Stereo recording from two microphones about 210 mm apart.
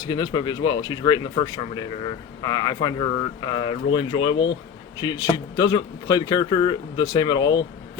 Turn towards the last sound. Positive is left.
turn(degrees=20)  # may be behind; listen again after turning